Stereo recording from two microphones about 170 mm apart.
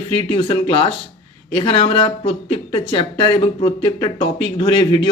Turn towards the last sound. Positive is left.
turn(degrees=30)  # may be behind; listen again after turning